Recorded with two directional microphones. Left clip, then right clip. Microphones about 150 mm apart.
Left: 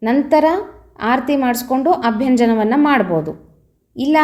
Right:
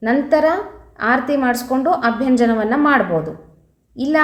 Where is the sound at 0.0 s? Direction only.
15° left (ahead or behind).